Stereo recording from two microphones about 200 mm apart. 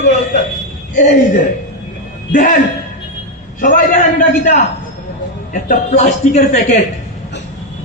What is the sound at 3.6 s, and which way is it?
A man's voice, 40° left (ahead or behind).